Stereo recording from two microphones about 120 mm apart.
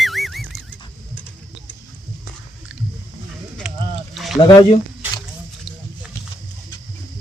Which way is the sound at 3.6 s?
Centre (ahead or behind).